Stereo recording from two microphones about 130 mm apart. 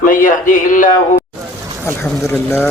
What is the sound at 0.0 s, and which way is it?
Music, 90° left.